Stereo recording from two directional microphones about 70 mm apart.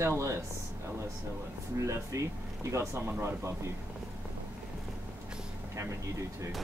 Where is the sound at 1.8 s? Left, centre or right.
Right.